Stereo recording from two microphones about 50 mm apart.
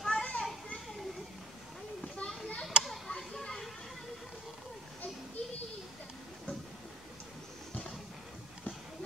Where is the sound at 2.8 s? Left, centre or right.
Centre.